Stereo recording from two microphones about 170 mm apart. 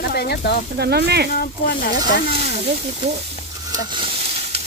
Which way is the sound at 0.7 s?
75° right (ahead or behind).